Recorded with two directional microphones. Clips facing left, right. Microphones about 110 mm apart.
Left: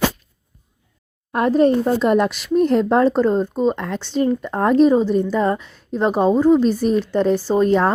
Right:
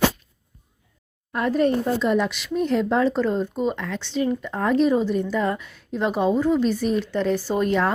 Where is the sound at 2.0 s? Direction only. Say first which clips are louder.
Left 5 dB; 55° left (ahead or behind).